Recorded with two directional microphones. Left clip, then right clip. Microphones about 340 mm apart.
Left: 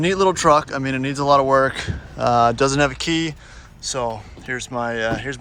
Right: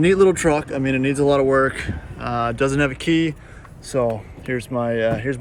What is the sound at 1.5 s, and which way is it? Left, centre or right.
Speech, centre.